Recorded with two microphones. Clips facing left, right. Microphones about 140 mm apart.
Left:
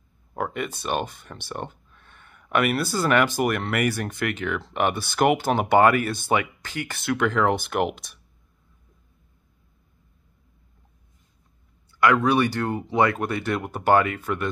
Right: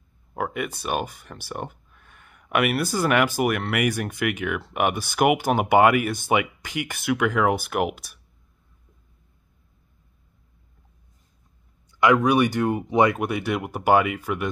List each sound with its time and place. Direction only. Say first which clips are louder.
0.3 s speech: right 1 dB; 10° right (ahead or behind)
12.0 s speech: right 1 dB; 15° right (ahead or behind)